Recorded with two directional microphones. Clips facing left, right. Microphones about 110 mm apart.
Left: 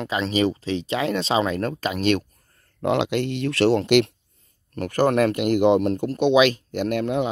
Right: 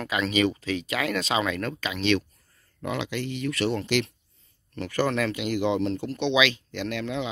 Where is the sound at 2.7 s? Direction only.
65° left (ahead or behind).